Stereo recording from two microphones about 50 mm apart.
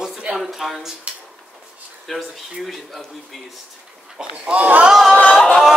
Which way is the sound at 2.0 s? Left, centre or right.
Centre.